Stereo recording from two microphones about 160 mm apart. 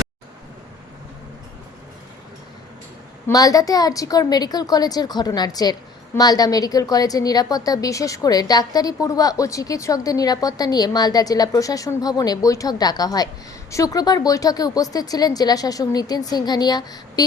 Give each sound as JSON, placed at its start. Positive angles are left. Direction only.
{"t": 3.2, "sound": "a woman's voice", "side_deg": 20}